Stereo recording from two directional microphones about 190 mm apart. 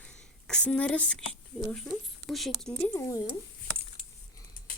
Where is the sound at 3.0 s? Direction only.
15° left (ahead or behind).